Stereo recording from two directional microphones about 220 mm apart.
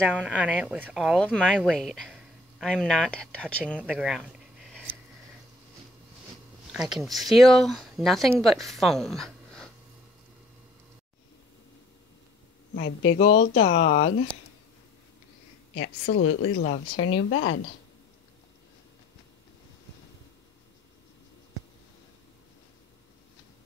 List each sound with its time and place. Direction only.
0.0 s speech: 5° right (ahead or behind)
6.7 s speech: centre (ahead or behind)
12.8 s speech: 65° left (ahead or behind)
13.6 s speech: 30° left (ahead or behind)
16.1 s speech: 65° left (ahead or behind)